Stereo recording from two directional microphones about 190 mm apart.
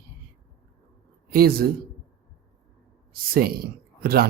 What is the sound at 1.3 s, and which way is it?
Speech, 50° right (ahead or behind).